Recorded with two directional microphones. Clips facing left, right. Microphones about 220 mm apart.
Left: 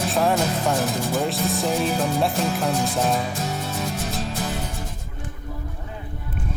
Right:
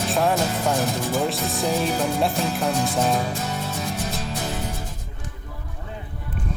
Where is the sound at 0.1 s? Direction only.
Centre (ahead or behind).